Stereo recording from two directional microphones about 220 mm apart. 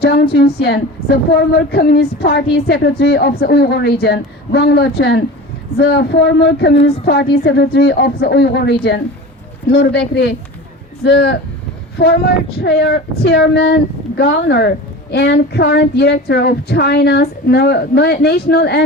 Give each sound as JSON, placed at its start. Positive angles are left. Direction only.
{"t": 0.0, "sound": "a woman's voice", "side_deg": 45}
{"t": 6.7, "sound": "a woman's voice", "side_deg": 25}
{"t": 7.0, "sound": "a woman's voice", "side_deg": 45}
{"t": 9.7, "sound": "a woman's voice", "side_deg": 50}